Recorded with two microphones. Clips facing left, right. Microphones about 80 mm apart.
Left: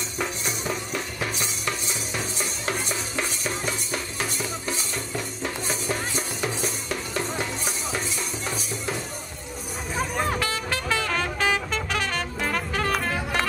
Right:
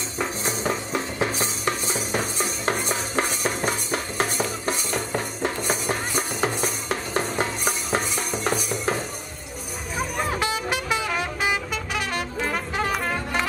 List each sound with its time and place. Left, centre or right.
0.5 s music: right
4.4 s music: right
10.4 s music: centre
12.9 s music: centre